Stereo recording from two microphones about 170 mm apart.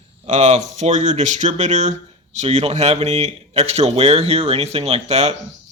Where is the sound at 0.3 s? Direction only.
45° right (ahead or behind).